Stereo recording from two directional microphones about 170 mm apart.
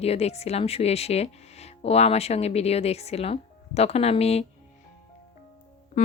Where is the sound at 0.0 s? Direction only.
40° left (ahead or behind).